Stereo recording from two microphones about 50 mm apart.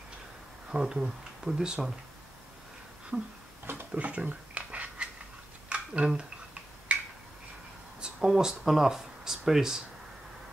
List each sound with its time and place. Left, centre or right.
0.7 s speech: centre
3.1 s a sound: right
8.0 s speech: centre